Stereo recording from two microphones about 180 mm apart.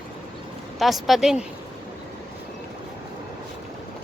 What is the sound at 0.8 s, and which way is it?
Speech, centre (ahead or behind).